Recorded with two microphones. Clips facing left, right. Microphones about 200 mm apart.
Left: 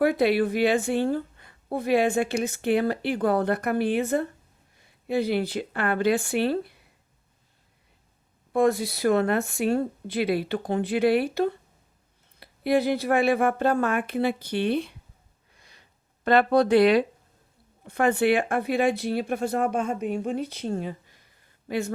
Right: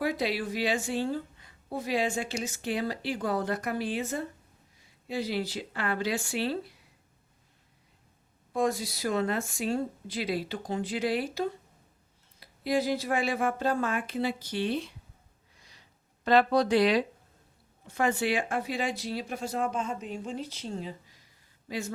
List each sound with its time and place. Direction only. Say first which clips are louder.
0.0 s a woman's voice: left 9 dB; 55° left (ahead or behind)
8.5 s a woman's voice: left 7 dB; 60° left (ahead or behind)
15.5 s a sound: left 2 dB; 55° left (ahead or behind)
17.8 s a woman's voice: left 6 dB; 60° left (ahead or behind)